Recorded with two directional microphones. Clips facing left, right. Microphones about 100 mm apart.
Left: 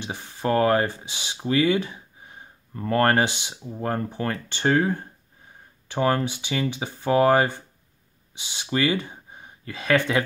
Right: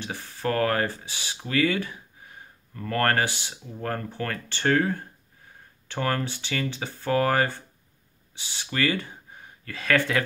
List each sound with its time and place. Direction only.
0.0 s speech: 20° left (ahead or behind)